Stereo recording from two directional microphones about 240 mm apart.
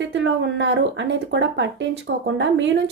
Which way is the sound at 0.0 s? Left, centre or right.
Right.